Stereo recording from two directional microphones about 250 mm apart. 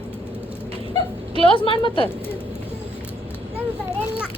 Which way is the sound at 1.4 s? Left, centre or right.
Left.